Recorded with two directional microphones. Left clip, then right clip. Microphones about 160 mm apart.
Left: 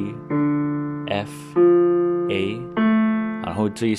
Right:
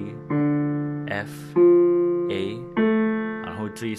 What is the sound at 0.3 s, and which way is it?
Piano, 40° right (ahead or behind).